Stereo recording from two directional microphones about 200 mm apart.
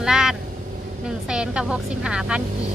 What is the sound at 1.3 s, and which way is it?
Speech, 5° right (ahead or behind).